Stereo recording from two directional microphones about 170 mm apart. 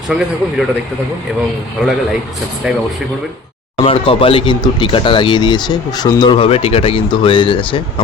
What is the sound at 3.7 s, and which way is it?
Speech, 30° left (ahead or behind).